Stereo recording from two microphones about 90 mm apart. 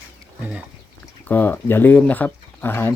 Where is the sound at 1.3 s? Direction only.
20° left (ahead or behind).